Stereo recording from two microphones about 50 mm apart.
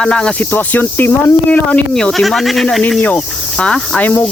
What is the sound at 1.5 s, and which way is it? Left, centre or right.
Speech, left.